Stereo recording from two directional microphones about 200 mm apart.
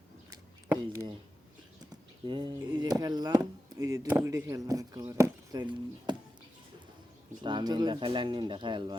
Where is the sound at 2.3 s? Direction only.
20° right (ahead or behind).